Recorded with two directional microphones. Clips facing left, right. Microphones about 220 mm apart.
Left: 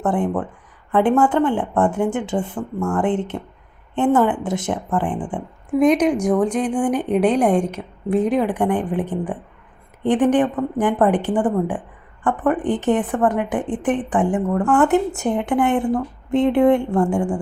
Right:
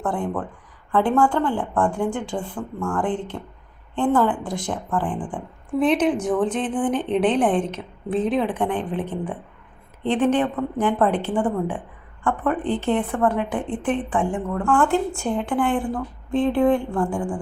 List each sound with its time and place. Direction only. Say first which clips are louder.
0.0 s a woman's voice: left 5 dB; 20° left (ahead or behind)